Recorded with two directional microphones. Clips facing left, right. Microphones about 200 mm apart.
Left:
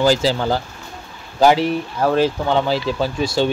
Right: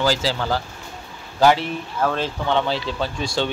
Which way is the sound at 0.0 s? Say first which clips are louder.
Left 5 dB; 15° left (ahead or behind).